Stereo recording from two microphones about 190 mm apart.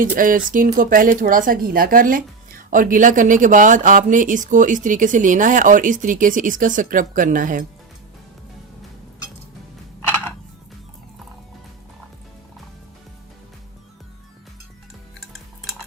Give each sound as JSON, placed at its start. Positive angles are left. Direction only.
{"t": 0.0, "sound": "speech", "side_deg": -45}